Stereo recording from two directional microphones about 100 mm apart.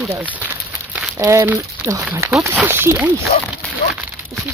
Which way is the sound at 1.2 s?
30° right (ahead or behind).